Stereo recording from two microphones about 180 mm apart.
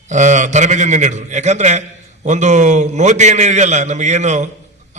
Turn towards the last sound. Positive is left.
turn(degrees=-40)  # may be behind; listen again after turning